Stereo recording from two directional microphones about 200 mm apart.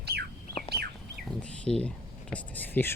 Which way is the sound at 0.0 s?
55° right (ahead or behind).